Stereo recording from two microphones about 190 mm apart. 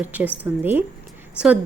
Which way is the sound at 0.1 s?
10° right (ahead or behind).